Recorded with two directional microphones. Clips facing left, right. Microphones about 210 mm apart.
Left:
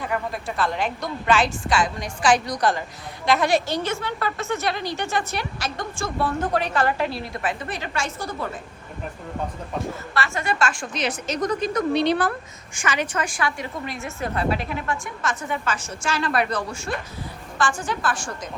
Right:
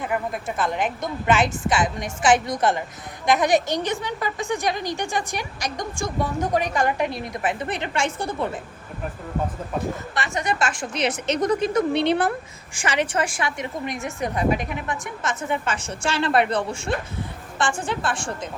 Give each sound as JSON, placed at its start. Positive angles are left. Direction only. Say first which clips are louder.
{"t": 0.0, "sound": "a woman's voice", "louder": "right 1 dB", "side_deg": -20}
{"t": 10.2, "sound": "a woman's voice", "louder": "left 1 dB", "side_deg": -15}